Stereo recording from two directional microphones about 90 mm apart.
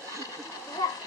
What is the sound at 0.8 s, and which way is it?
Speech, 50° left (ahead or behind).